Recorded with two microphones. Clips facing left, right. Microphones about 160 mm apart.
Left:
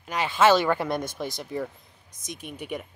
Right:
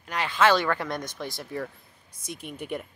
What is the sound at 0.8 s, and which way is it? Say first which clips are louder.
Speech: left 4 dB; 10° left (ahead or behind).